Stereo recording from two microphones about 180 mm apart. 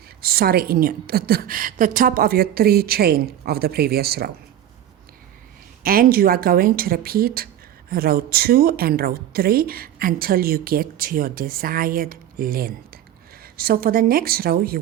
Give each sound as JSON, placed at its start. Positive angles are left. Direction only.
{"t": 0.2, "sound": "a woman's voice", "side_deg": -55}
{"t": 5.8, "sound": "a woman's voice", "side_deg": -55}